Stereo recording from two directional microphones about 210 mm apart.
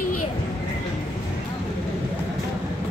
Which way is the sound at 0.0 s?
90° left.